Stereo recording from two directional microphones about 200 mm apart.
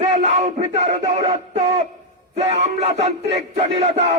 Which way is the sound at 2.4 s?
30° right (ahead or behind).